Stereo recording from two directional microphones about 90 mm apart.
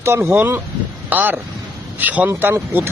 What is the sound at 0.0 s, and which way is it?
Speech, 25° right (ahead or behind).